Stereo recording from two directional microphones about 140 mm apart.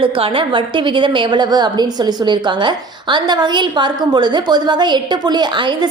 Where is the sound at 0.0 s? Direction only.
40° right (ahead or behind).